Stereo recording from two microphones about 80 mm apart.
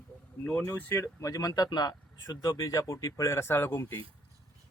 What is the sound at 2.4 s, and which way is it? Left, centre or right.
Speech, left.